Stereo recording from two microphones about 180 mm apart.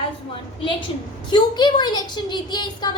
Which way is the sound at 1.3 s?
25° left (ahead or behind).